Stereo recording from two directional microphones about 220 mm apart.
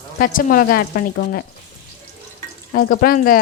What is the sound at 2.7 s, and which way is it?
Speech, 40° left (ahead or behind).